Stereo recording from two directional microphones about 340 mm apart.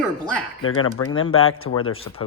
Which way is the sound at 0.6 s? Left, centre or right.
Left.